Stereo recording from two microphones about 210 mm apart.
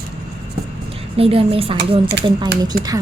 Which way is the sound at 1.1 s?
25° right (ahead or behind).